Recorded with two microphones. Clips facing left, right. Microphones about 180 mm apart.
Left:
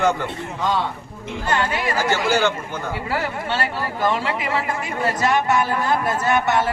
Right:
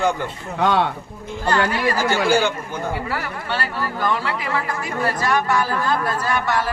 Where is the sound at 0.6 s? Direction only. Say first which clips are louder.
Right 4 dB; 65° right (ahead or behind).